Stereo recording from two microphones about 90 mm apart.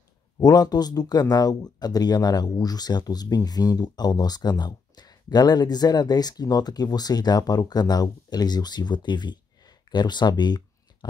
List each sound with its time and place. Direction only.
0.4 s speech: 50° left (ahead or behind)